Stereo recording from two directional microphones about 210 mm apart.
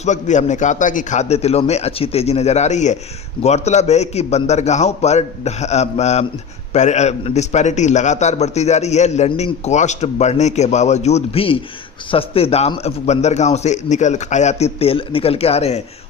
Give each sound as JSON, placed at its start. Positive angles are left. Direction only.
{"t": 0.0, "sound": "a man's voice", "side_deg": 35}